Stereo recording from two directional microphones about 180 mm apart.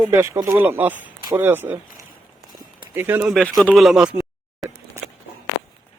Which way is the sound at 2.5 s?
10° right (ahead or behind).